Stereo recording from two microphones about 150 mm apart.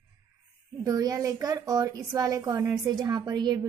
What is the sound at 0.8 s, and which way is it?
A woman's voice, 25° right (ahead or behind).